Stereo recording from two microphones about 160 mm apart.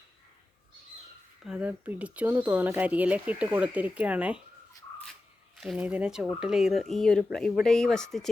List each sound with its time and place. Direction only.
1.5 s speech: 10° right (ahead or behind)
5.5 s speech: 5° right (ahead or behind)